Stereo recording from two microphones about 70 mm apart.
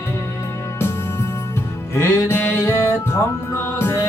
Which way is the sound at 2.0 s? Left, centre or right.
Left.